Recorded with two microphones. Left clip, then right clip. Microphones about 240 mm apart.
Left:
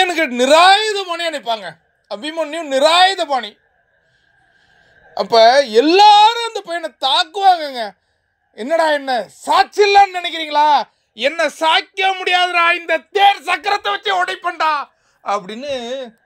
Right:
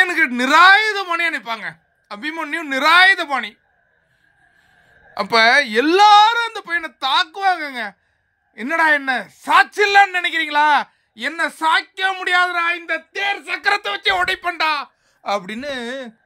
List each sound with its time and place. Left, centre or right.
0.0 s speech: centre
5.1 s speech: centre
11.2 s speech: centre
12.6 s speech: centre
13.6 s speech: centre